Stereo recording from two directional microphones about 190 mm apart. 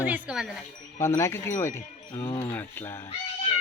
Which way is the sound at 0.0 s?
5° right (ahead or behind).